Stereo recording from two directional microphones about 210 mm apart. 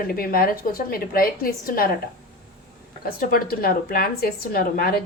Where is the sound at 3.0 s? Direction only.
45° left (ahead or behind).